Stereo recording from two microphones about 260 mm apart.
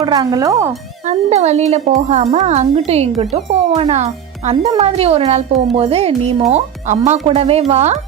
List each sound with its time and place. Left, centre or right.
0.0 s speech: centre
1.0 s speech: right